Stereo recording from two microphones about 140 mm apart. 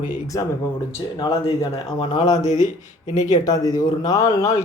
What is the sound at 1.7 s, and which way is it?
Speech, 40° left (ahead or behind).